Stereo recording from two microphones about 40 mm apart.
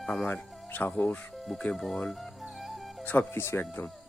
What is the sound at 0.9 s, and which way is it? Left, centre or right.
Speech, left.